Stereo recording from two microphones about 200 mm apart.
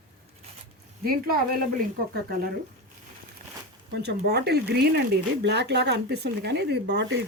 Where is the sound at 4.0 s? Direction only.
55° right (ahead or behind).